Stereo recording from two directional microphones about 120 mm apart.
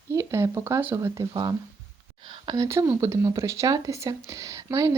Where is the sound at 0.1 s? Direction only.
25° right (ahead or behind).